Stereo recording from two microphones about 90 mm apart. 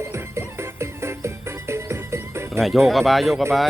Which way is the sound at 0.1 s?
30° right (ahead or behind).